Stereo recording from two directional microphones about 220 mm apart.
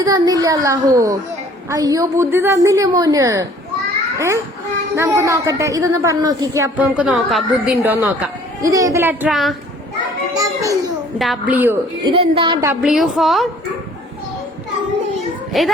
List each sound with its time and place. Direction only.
0.0 s a woman's voice: 15° right (ahead or behind); by 9.6 s centre (ahead or behind)
10.3 s children playing: 15° right (ahead or behind)
11.2 s a woman's voice: 5° right (ahead or behind)
12.0 s a woman's voice: 25° right (ahead or behind)
12.6 s a woman's voice: 5° right (ahead or behind)
15.5 s a woman's voice: centre (ahead or behind)